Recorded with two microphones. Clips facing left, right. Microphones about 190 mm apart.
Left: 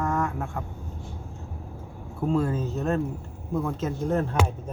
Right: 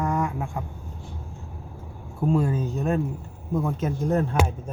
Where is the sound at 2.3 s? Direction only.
15° right (ahead or behind).